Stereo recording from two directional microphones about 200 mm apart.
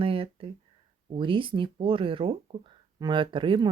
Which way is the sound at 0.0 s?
25° right (ahead or behind).